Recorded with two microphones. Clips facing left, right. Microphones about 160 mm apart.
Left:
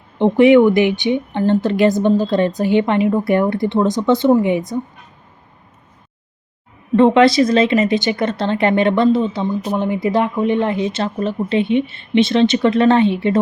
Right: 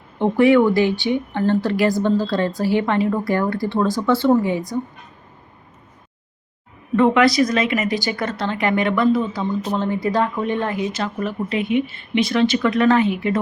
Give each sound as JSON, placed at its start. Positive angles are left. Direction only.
{"t": 0.2, "sound": "speech", "side_deg": 20}
{"t": 6.9, "sound": "speech", "side_deg": 30}